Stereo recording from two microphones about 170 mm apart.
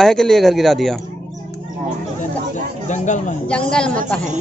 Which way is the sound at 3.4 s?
5° left (ahead or behind).